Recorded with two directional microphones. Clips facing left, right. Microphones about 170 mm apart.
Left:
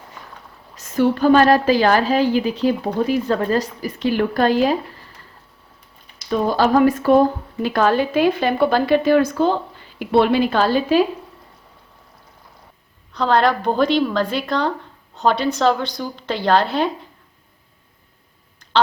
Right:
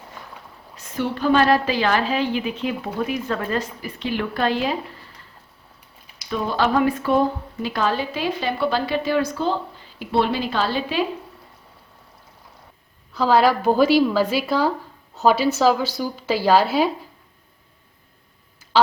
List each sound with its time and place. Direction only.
0.8 s a woman's voice: 45° left (ahead or behind)
6.3 s a woman's voice: 40° left (ahead or behind)
13.1 s a woman's voice: 5° right (ahead or behind)
18.6 s a sound: 10° right (ahead or behind)